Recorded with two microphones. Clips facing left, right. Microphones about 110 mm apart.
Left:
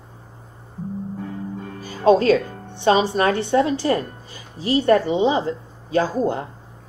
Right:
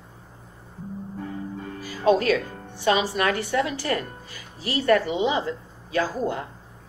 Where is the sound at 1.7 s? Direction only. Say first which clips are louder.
Left 5 dB; 30° left (ahead or behind).